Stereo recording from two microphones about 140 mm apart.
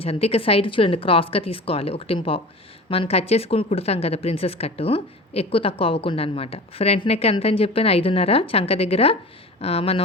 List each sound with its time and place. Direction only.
0.0 s speech: 45° left (ahead or behind)